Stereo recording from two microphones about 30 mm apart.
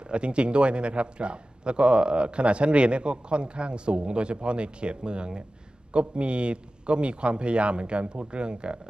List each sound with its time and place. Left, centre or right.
0.1 s speech: right